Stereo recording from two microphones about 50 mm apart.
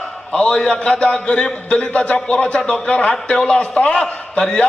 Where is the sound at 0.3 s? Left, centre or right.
Centre.